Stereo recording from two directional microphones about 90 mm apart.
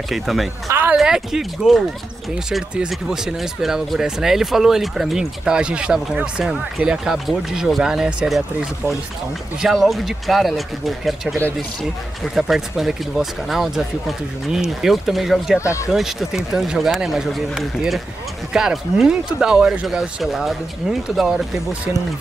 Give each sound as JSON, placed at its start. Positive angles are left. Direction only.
{"t": 0.1, "sound": "speech", "side_deg": 0}
{"t": 9.6, "sound": "speech", "side_deg": 0}
{"t": 15.6, "sound": "speech", "side_deg": 35}
{"t": 15.9, "sound": "speech", "side_deg": -5}